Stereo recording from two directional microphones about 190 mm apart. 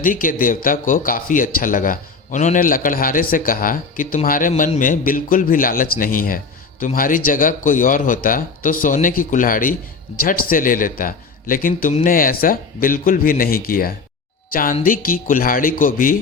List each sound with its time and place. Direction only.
0.0 s a man's voice: 45° left (ahead or behind)